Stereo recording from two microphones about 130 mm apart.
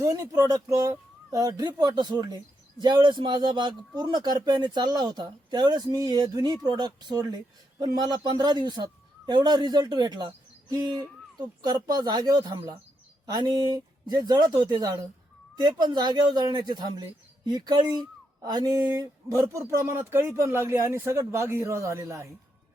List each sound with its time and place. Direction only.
0.0 s a man's voice: 25° right (ahead or behind)